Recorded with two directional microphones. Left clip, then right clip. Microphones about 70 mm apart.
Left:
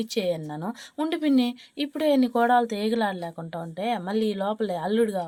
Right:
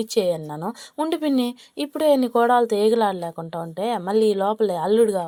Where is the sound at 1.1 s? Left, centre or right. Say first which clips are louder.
Even; right.